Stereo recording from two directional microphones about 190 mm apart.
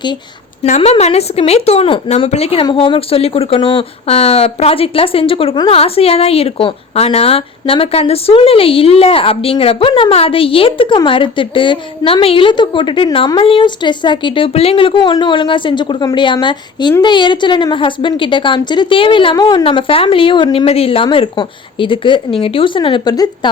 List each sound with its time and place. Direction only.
0.6 s a woman's voice: 35° left (ahead or behind); by 23.5 s 20° left (ahead or behind)